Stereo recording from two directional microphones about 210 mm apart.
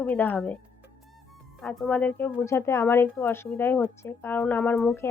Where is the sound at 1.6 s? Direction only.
5° left (ahead or behind).